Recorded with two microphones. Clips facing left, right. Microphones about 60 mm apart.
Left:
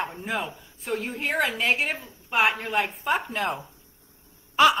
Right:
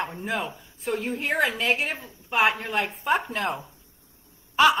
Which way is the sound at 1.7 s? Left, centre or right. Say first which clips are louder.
Left 1 dB; centre.